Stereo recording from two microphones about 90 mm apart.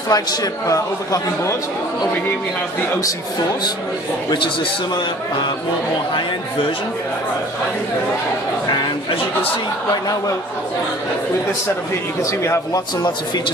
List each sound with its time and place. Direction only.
0.1 s speech: 45° left (ahead or behind)
12.2 s speech: 35° left (ahead or behind)